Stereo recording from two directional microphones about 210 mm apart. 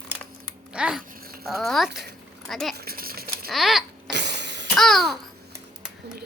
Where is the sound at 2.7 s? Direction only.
45° right (ahead or behind).